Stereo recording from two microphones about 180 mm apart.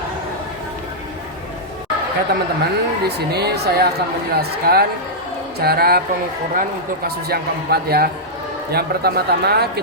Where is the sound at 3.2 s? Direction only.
65° right (ahead or behind).